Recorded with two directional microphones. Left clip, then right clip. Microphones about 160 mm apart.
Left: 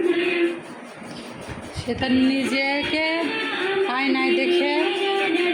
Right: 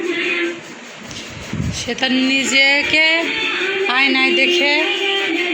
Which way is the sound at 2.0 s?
10° left (ahead or behind).